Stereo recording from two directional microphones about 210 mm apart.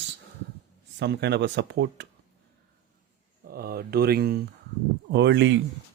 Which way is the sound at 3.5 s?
45° right (ahead or behind).